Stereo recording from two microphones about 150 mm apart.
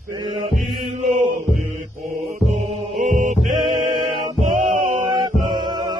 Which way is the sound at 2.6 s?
45° right (ahead or behind).